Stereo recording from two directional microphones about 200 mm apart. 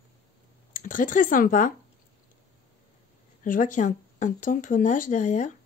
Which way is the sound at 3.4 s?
40° left (ahead or behind).